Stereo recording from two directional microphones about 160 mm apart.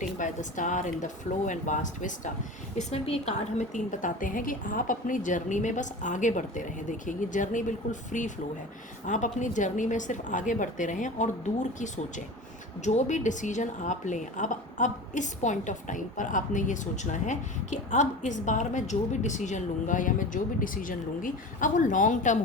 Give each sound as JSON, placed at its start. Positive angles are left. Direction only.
{"t": 0.2, "sound": "a woman's voice", "side_deg": 50}